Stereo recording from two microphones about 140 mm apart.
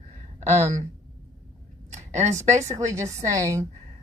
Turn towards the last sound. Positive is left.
turn(degrees=-20)  # may be behind; listen again after turning